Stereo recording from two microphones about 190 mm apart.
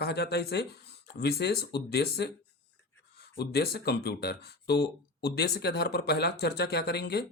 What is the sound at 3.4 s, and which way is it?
Speech, 55° left (ahead or behind).